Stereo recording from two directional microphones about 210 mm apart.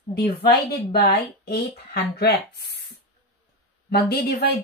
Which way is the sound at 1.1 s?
50° left (ahead or behind).